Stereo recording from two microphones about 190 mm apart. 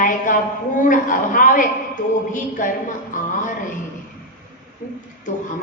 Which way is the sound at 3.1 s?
45° left (ahead or behind).